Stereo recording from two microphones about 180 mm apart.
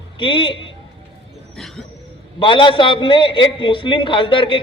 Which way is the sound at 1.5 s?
Centre (ahead or behind).